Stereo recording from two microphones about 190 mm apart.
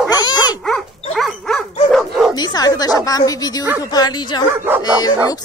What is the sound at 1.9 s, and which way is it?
Bow-wow, centre (ahead or behind).